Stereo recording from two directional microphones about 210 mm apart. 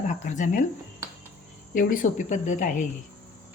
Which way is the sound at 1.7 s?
40° left (ahead or behind).